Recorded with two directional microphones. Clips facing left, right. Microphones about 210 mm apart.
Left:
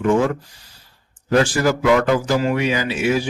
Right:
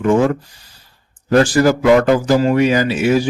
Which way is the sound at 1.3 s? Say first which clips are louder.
Right 5 dB; 40° right (ahead or behind).